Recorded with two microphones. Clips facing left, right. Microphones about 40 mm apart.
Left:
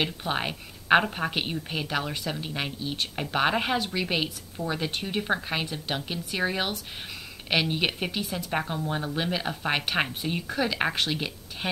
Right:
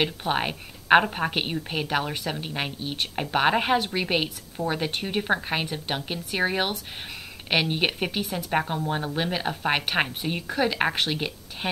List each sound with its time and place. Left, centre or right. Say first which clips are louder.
0.0 s a woman's voice: right 3 dB; centre